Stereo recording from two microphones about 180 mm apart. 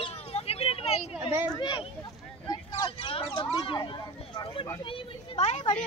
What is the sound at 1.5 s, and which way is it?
Speech, 25° left (ahead or behind).